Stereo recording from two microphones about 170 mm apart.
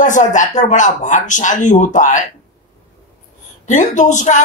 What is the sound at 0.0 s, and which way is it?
Speech, 45° left (ahead or behind).